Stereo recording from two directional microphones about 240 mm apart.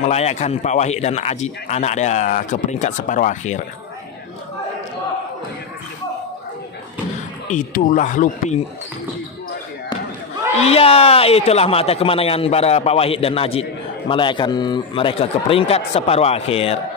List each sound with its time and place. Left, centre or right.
0.0 s speech: left
7.4 s speech: left
10.6 s speech: left